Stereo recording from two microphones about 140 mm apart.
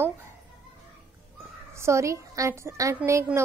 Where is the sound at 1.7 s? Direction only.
20° right (ahead or behind).